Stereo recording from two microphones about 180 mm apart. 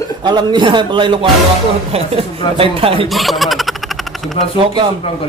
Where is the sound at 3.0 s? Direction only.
Centre (ahead or behind).